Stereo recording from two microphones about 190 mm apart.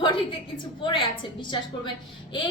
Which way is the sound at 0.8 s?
25° left (ahead or behind).